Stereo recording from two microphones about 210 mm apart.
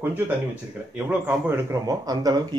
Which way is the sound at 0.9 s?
10° right (ahead or behind).